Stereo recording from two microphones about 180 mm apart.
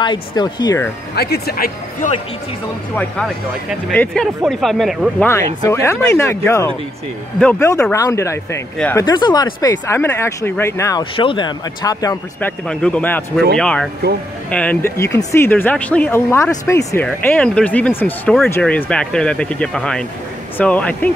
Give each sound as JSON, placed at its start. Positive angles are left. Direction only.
{"t": 0.4, "sound": "speech", "side_deg": 20}
{"t": 1.1, "sound": "speech", "side_deg": 60}
{"t": 3.9, "sound": "speech", "side_deg": 5}
{"t": 5.7, "sound": "speech", "side_deg": 15}
{"t": 12.4, "sound": "speech", "side_deg": 5}
{"t": 17.0, "sound": "speech", "side_deg": 5}